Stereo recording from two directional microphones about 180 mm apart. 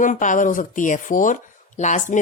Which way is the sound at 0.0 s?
45° left (ahead or behind).